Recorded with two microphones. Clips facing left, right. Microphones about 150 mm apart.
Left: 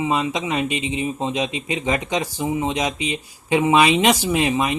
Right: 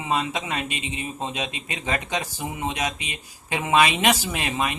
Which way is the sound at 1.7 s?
15° left (ahead or behind).